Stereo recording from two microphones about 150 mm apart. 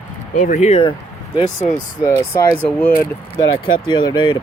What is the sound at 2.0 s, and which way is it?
Speech, 20° left (ahead or behind).